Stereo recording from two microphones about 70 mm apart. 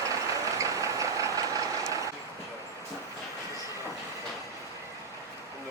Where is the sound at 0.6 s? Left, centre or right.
Right.